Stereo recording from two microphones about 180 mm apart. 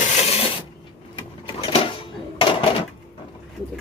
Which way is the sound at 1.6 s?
30° left (ahead or behind).